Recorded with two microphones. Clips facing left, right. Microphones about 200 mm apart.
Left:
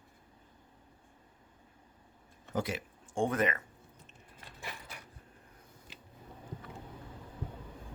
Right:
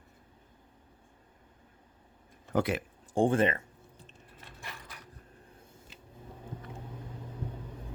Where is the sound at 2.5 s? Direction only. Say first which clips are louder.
Right 6 dB; 60° right (ahead or behind).